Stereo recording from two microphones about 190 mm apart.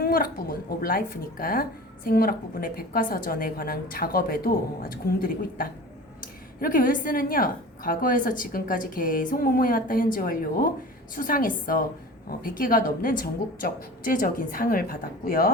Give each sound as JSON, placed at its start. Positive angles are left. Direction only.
{"t": 0.0, "sound": "a woman's voice", "side_deg": 50}